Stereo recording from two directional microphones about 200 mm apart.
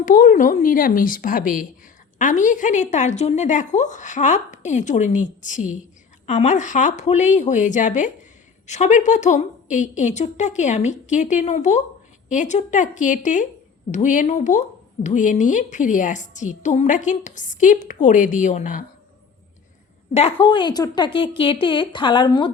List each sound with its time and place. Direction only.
0.0 s speech: 40° left (ahead or behind)
20.4 s a woman's voice: 25° left (ahead or behind)